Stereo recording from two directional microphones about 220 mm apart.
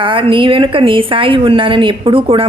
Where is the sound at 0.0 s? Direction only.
25° right (ahead or behind).